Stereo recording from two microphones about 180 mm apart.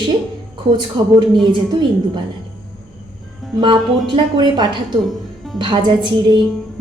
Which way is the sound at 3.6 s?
30° right (ahead or behind).